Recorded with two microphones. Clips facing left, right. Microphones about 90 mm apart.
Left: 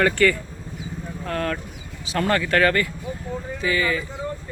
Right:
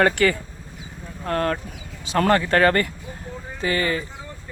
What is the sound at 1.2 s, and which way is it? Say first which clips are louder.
Speech: right 3 dB; 40° right (ahead or behind).